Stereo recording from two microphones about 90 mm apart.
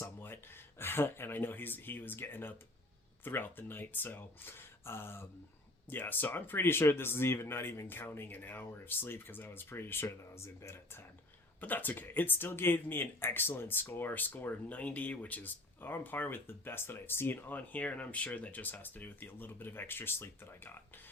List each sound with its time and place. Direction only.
0.0 s speech: 25° left (ahead or behind)